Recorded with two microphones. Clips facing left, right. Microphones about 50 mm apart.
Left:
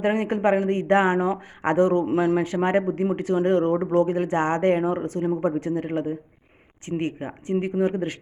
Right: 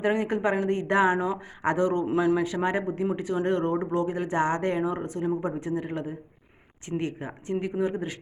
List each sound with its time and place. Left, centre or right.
0.0 s speech: left
7.8 s speech: left